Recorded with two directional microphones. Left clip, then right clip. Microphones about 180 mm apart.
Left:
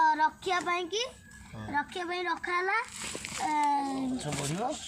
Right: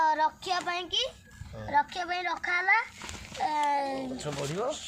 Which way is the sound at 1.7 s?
25° right (ahead or behind).